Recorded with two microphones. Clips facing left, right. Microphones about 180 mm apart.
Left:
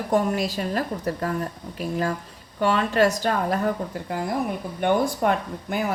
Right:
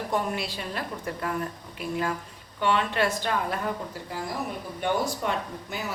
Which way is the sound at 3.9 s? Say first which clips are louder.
Left 6 dB; 55° left (ahead or behind).